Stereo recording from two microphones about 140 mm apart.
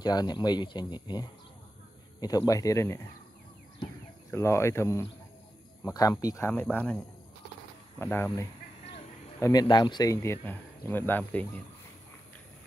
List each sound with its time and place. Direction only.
0.0 s speech: 30° left (ahead or behind)
4.3 s speech: 20° left (ahead or behind)
8.0 s speech: 15° left (ahead or behind)
9.4 s speech: 30° left (ahead or behind); by 11.6 s 10° left (ahead or behind)